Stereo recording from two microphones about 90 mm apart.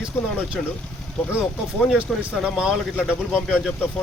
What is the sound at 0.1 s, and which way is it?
Speech, 20° left (ahead or behind).